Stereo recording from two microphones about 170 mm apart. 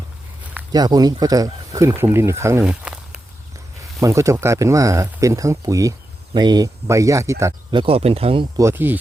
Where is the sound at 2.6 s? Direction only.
5° right (ahead or behind).